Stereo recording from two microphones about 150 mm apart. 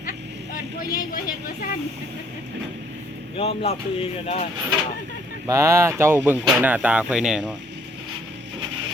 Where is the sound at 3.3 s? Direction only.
40° left (ahead or behind).